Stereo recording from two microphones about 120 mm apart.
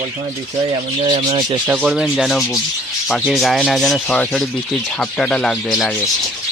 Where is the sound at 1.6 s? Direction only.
15° right (ahead or behind).